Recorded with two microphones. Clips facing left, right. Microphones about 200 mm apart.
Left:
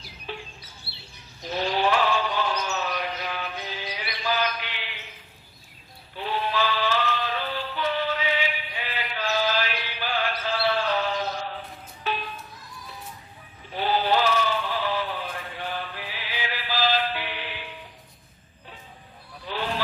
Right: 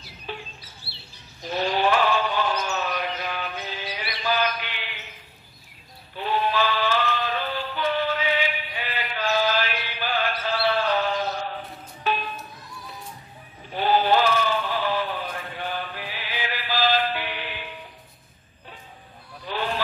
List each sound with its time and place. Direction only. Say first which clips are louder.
0.3 s bird: right 1 dB; 50° right (ahead or behind)
1.5 s a sound: right 2 dB; 50° right (ahead or behind)
6.1 s music: right 3 dB; 50° right (ahead or behind)
13.7 s synthetic singing: right 3 dB; 50° right (ahead or behind)
15.6 s music: right 2 dB; 50° right (ahead or behind)
19.5 s a sound: right 2 dB; 50° right (ahead or behind)